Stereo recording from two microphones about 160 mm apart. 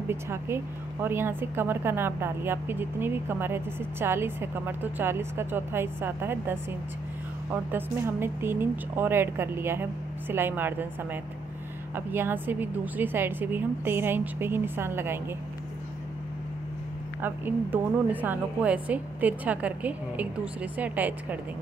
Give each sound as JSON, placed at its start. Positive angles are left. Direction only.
{"t": 0.1, "sound": "a woman's voice", "side_deg": -15}
{"t": 7.7, "sound": "a woman's voice", "side_deg": -15}
{"t": 11.9, "sound": "a woman's voice", "side_deg": -15}
{"t": 17.2, "sound": "a woman's voice", "side_deg": -10}